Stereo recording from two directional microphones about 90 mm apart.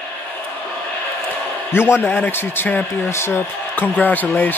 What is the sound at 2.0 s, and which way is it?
A man's voice, 20° left (ahead or behind).